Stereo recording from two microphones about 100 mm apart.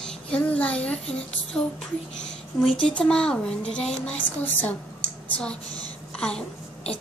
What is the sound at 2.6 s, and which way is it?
Speech, 60° left (ahead or behind).